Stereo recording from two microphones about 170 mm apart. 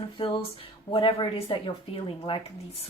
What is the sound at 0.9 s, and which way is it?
A woman's voice, 30° left (ahead or behind).